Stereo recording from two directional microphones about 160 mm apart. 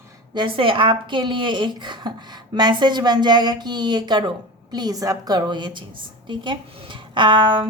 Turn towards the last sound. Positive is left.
turn(degrees=-30)  # may be behind; listen again after turning